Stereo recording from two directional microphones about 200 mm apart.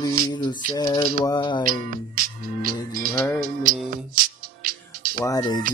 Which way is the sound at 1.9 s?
45° right (ahead or behind).